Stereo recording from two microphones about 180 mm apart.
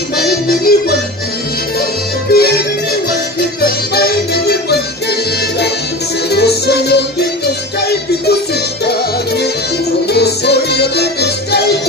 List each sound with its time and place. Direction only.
0.2 s music: 60° left (ahead or behind)
2.3 s music: 60° left (ahead or behind)
3.6 s music: 60° left (ahead or behind)
6.3 s music: 65° left (ahead or behind)
10.1 s music: 65° left (ahead or behind)